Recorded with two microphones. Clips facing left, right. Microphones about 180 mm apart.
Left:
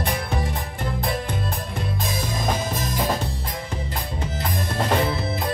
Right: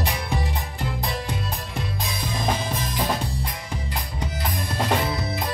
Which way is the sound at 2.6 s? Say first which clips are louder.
Left 2 dB; 45° left (ahead or behind).